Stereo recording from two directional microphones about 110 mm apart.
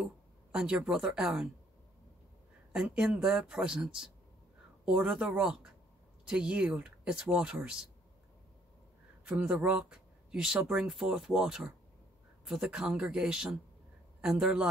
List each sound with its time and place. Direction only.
0.0 s speech: 10° right (ahead or behind)
2.7 s speech: 5° right (ahead or behind)
9.4 s speech: 10° right (ahead or behind)